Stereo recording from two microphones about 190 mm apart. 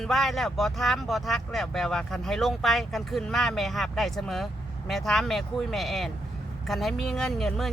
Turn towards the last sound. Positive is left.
turn(degrees=0)  # may be behind; listen again after turning